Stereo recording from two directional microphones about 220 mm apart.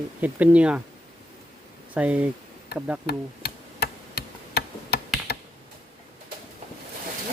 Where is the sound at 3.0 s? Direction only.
45° left (ahead or behind).